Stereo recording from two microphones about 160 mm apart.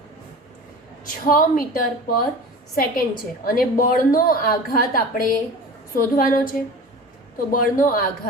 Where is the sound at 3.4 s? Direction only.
60° left (ahead or behind).